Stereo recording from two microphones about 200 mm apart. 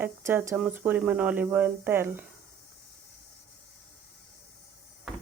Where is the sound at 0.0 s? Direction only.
10° right (ahead or behind).